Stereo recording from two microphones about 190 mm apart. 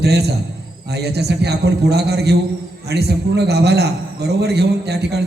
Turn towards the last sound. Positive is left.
turn(degrees=-60)  # may be behind; listen again after turning